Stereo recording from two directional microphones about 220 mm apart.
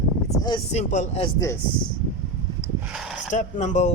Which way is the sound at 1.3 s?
15° left (ahead or behind).